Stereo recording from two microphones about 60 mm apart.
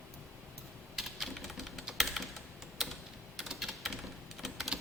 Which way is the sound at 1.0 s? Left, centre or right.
Centre.